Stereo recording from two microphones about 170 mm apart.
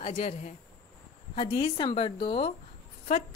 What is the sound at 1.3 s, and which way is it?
A woman's voice, 30° left (ahead or behind).